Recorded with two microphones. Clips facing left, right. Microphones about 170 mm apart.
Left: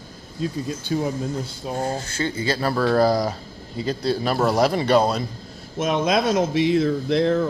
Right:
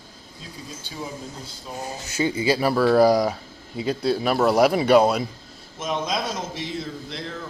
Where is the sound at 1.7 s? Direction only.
70° left (ahead or behind).